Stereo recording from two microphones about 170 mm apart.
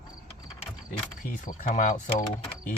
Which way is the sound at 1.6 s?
50° left (ahead or behind).